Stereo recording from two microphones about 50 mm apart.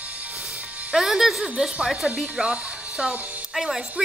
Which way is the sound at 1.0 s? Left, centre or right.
Centre.